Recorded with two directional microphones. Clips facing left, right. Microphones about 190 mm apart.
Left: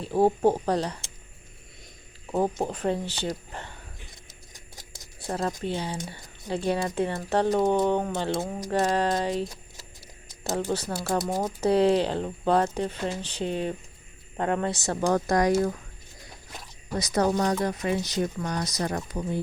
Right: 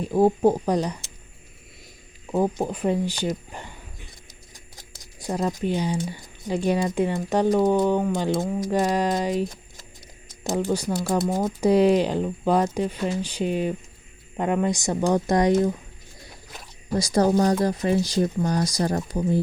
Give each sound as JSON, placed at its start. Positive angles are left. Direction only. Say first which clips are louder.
{"t": 0.0, "sound": "speech", "louder": "right 3 dB", "side_deg": -10}
{"t": 2.3, "sound": "speech", "louder": "right 3 dB", "side_deg": -5}
{"t": 5.2, "sound": "speech", "louder": "right 4 dB", "side_deg": -15}
{"t": 10.5, "sound": "speech", "louder": "right 4 dB", "side_deg": -10}
{"t": 11.3, "sound": "speech", "louder": "right 3 dB", "side_deg": 10}
{"t": 11.6, "sound": "speech", "louder": "right 3 dB", "side_deg": -10}
{"t": 17.0, "sound": "speech", "louder": "right 4 dB", "side_deg": -35}